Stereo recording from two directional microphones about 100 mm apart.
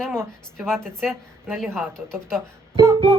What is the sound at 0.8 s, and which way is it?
Speech, 5° left (ahead or behind).